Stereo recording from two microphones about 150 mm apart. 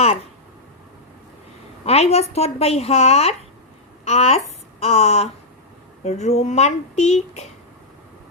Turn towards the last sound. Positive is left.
turn(degrees=50)  # may be behind; listen again after turning